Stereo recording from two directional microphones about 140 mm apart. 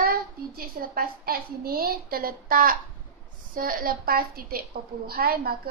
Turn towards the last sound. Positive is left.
turn(degrees=-90)